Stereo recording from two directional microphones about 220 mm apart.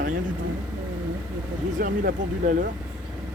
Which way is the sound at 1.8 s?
40° right (ahead or behind).